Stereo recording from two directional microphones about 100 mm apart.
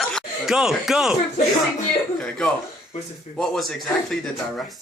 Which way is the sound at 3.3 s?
5° left (ahead or behind).